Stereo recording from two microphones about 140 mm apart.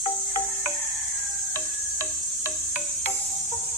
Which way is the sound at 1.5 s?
20° left (ahead or behind).